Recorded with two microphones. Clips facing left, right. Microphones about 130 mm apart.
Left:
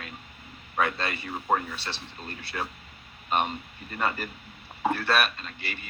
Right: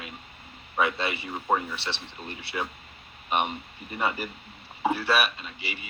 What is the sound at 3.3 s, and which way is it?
A man's voice, 15° right (ahead or behind).